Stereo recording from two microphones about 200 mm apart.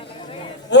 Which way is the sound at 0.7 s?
60° left (ahead or behind).